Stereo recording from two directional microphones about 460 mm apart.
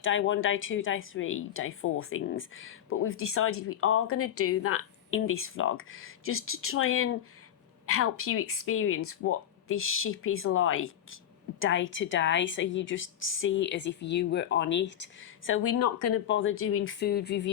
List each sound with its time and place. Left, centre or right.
0.0 s a woman's voice: left